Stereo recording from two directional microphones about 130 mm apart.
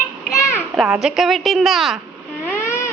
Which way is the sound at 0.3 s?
20° left (ahead or behind).